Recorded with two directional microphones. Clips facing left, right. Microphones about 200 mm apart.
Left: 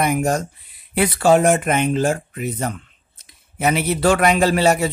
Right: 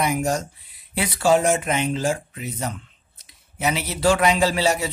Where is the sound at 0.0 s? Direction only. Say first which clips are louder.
Left 3 dB; 55° left (ahead or behind).